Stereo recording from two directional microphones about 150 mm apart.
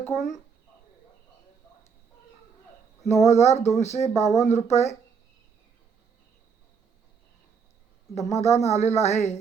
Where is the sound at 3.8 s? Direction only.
50° left (ahead or behind).